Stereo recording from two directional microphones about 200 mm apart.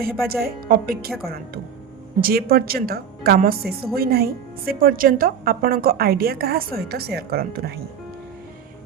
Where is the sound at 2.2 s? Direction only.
50° right (ahead or behind).